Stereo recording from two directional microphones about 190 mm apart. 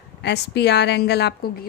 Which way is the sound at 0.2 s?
60° left (ahead or behind).